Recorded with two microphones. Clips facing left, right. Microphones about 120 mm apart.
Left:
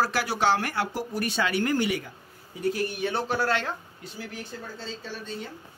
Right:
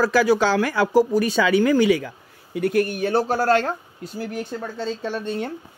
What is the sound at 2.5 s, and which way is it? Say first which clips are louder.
Speech: right 7 dB; 65° right (ahead or behind).